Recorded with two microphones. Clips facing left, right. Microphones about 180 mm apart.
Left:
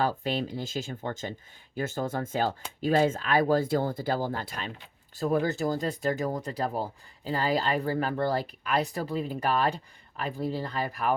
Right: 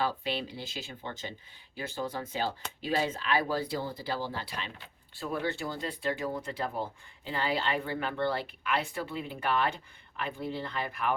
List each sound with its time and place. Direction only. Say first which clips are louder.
0.0 s speech: left 4 dB; 45° left (ahead or behind)